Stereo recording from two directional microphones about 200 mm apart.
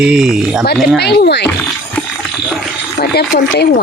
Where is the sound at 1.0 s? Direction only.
55° left (ahead or behind).